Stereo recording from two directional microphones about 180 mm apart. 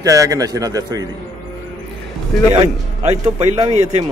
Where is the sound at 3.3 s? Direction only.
30° right (ahead or behind).